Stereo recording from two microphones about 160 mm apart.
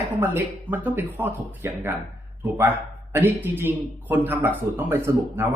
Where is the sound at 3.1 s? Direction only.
10° right (ahead or behind).